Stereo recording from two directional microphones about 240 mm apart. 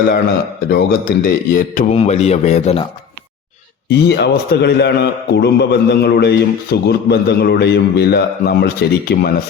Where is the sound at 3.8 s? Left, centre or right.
Left.